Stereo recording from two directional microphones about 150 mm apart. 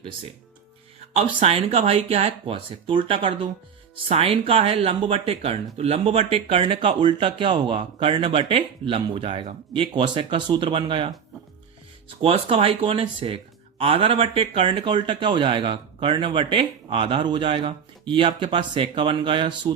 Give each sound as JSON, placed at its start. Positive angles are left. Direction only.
{"t": 1.1, "sound": "speech", "side_deg": -45}